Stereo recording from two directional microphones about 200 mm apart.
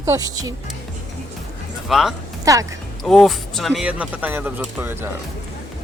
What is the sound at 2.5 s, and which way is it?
Speech, 15° right (ahead or behind).